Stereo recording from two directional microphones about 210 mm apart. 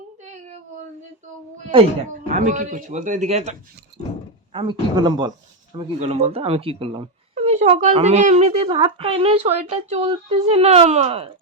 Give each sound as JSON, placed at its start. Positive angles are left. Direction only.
{"t": 2.2, "sound": "a man's voice", "side_deg": -35}
{"t": 6.0, "sound": "speech", "side_deg": -30}